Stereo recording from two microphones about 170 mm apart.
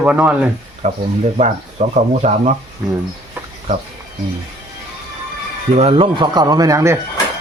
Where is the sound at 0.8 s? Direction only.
45° right (ahead or behind).